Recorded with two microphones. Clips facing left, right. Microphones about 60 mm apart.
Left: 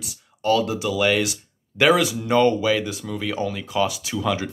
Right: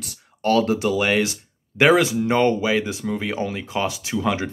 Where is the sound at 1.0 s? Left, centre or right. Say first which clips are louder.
Even; right.